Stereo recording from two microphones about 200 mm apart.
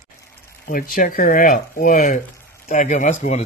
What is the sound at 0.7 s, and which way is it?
Speech, 45° left (ahead or behind).